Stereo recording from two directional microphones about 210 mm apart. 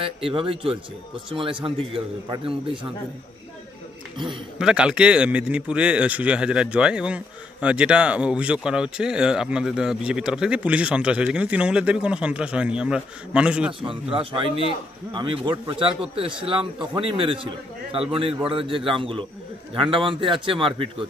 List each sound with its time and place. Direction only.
0.0 s a man's voice: 25° right (ahead or behind)
4.6 s speech: 5° right (ahead or behind)
14.1 s a man's voice: 25° right (ahead or behind)